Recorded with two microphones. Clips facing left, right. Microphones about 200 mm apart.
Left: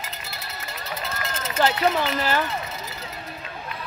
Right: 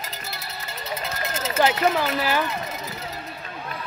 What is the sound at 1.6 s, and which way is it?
Speech, 15° right (ahead or behind).